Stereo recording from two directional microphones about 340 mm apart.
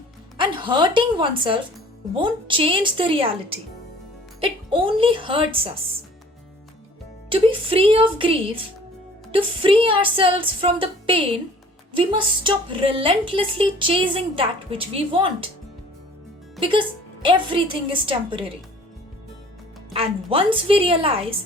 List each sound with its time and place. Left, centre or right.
0.3 s a woman's voice: centre
7.3 s a woman's voice: centre
16.6 s speech: centre
18.0 s a woman's voice: centre
19.9 s a woman's voice: centre